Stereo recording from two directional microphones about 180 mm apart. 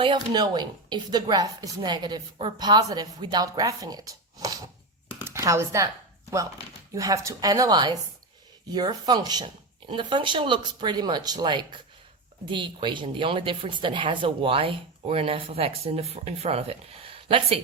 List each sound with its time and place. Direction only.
0.0 s a woman's voice: 25° right (ahead or behind)
6.9 s a woman's voice: 20° right (ahead or behind)